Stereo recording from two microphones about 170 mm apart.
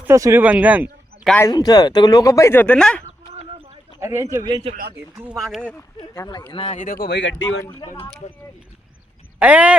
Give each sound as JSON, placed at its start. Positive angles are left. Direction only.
{"t": 0.0, "sound": "speech", "side_deg": -15}
{"t": 1.5, "sound": "speech", "side_deg": 25}
{"t": 4.0, "sound": "a man's voice", "side_deg": -15}
{"t": 5.1, "sound": "a man's voice", "side_deg": -10}
{"t": 5.4, "sound": "speech", "side_deg": 0}
{"t": 6.0, "sound": "speech", "side_deg": 25}
{"t": 6.5, "sound": "speech", "side_deg": 35}
{"t": 9.4, "sound": "a man's voice", "side_deg": -10}